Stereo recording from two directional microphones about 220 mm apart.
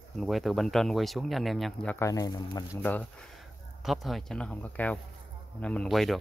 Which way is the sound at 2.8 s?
5° left (ahead or behind).